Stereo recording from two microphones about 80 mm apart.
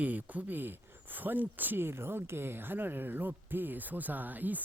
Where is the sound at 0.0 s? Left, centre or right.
Centre.